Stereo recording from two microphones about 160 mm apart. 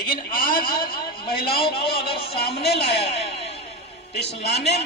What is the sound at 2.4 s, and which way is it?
Speech, 90° left.